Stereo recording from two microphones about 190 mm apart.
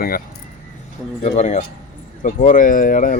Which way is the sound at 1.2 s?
35° left (ahead or behind).